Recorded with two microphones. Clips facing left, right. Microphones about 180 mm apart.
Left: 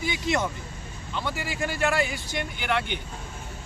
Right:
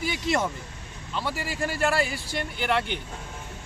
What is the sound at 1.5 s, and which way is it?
Speech, 35° right (ahead or behind).